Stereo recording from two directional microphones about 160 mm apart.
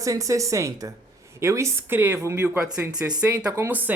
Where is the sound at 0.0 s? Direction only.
20° right (ahead or behind).